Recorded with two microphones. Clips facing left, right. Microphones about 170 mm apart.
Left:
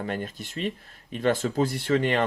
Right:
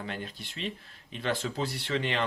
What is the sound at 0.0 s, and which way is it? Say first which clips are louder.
Speech: left 7 dB; 45° left (ahead or behind).